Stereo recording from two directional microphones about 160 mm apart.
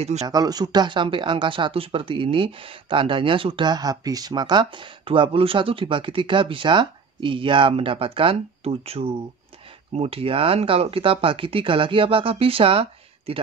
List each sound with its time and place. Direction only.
0.0 s speech: 45° right (ahead or behind)
0.3 s speech: 25° right (ahead or behind)